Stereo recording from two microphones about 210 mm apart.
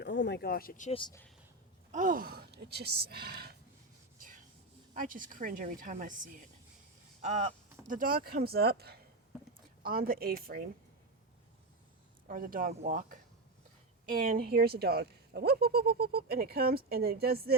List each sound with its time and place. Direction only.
0.0 s speech: 55° left (ahead or behind); by 0.9 s 40° left (ahead or behind)
0.9 s speech: 20° left (ahead or behind)
1.9 s speech: 40° right (ahead or behind)
4.9 s speech: 40° right (ahead or behind)
7.2 s a sound: 35° right (ahead or behind)
7.9 s speech: 40° right (ahead or behind)
12.3 s speech: 40° right (ahead or behind)
14.3 s speech: 45° right (ahead or behind)